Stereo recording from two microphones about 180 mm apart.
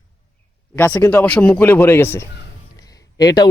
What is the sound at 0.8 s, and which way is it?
Speech, 10° left (ahead or behind).